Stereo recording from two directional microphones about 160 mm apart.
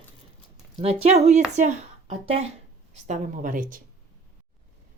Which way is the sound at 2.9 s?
50° right (ahead or behind).